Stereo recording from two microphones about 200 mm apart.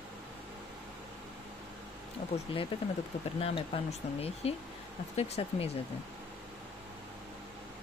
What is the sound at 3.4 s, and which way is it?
Speech, 30° left (ahead or behind).